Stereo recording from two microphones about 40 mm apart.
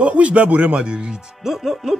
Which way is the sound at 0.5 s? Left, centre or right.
Right.